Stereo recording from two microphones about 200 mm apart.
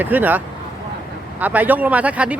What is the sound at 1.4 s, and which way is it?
Speech, 10° right (ahead or behind).